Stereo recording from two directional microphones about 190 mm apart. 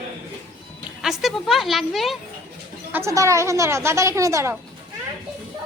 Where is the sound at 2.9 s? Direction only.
15° right (ahead or behind).